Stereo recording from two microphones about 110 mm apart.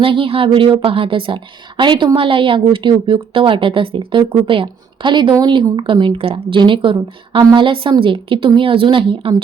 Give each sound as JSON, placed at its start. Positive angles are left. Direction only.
{"t": 0.0, "sound": "a woman's voice", "side_deg": -55}